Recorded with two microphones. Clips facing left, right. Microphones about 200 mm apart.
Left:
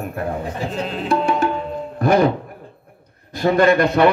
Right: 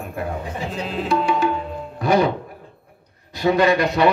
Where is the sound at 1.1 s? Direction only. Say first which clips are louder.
Left 1 dB; 50° left (ahead or behind).